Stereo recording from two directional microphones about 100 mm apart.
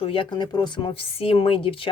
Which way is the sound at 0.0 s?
60° left (ahead or behind).